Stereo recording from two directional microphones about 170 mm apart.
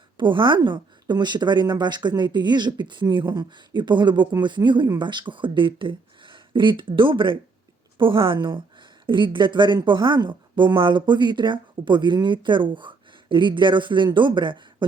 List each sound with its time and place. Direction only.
0.2 s speech: 30° right (ahead or behind)